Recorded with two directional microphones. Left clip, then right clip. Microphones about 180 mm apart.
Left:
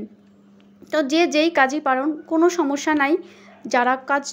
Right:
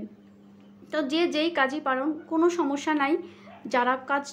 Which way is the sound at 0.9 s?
35° left (ahead or behind).